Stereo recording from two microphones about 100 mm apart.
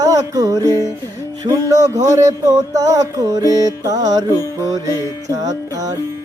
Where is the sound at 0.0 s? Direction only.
35° right (ahead or behind).